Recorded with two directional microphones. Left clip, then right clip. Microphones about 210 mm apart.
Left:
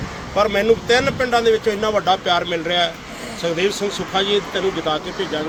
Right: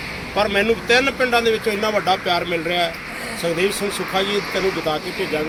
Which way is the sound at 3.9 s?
15° right (ahead or behind).